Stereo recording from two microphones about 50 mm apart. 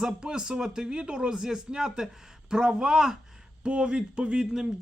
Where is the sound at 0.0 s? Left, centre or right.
Centre.